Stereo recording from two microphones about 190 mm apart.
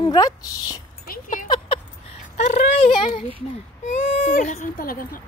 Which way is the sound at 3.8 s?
45° left (ahead or behind).